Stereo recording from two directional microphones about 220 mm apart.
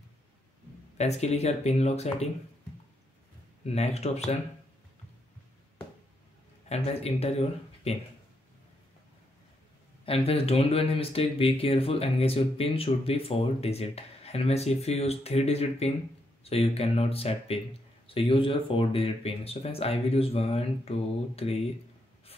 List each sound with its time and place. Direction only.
0.9 s speech: 30° left (ahead or behind)
3.6 s speech: 30° left (ahead or behind)
6.7 s speech: 30° left (ahead or behind)
10.0 s speech: 25° left (ahead or behind)